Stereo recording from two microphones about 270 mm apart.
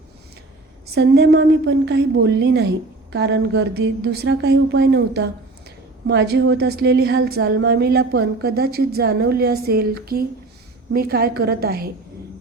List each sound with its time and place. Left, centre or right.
0.9 s a woman's voice: right